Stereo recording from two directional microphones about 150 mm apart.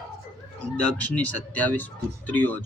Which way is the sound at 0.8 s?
10° left (ahead or behind).